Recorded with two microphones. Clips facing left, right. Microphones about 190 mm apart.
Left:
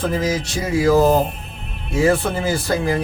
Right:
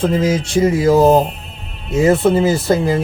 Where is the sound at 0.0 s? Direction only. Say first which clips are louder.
Right 5 dB; 25° right (ahead or behind).